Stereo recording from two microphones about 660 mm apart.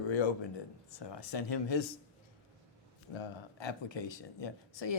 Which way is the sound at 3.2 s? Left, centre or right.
Left.